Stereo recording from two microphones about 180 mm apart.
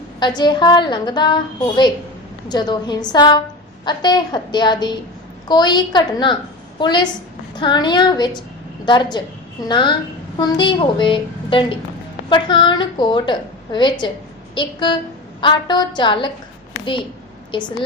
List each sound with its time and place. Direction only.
0.2 s a woman's voice: 25° left (ahead or behind)
17.5 s a woman's voice: 25° left (ahead or behind)